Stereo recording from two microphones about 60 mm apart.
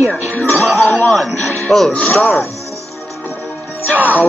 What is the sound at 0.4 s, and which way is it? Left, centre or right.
Music, left.